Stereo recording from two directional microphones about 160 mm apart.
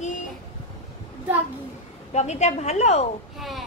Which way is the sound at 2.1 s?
45° left (ahead or behind).